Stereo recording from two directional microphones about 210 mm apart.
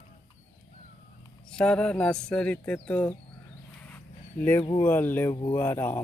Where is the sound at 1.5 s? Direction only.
5° left (ahead or behind).